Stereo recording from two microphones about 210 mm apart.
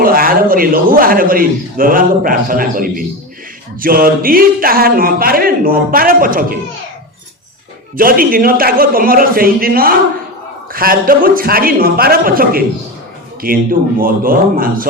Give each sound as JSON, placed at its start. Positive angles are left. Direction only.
{"t": 0.0, "sound": "a man's voice", "side_deg": -45}
{"t": 7.9, "sound": "a man's voice", "side_deg": -45}